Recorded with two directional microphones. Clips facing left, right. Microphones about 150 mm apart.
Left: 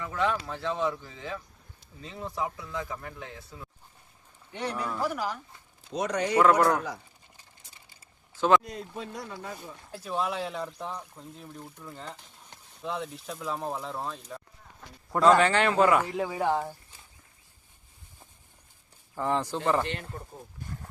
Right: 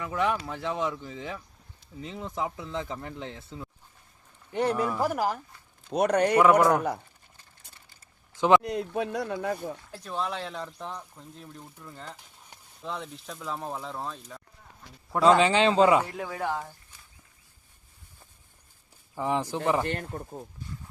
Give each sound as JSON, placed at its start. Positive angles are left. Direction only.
{"t": 0.0, "sound": "speech", "side_deg": -15}
{"t": 4.5, "sound": "speech", "side_deg": -45}
{"t": 5.9, "sound": "a man's voice", "side_deg": -60}
{"t": 6.4, "sound": "speech", "side_deg": -10}
{"t": 8.6, "sound": "speech", "side_deg": -70}
{"t": 10.0, "sound": "speech", "side_deg": 5}
{"t": 15.2, "sound": "speech", "side_deg": -20}
{"t": 16.2, "sound": "speech", "side_deg": 20}
{"t": 19.1, "sound": "speech", "side_deg": -15}